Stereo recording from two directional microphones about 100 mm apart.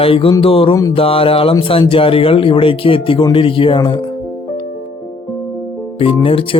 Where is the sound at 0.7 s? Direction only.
35° left (ahead or behind).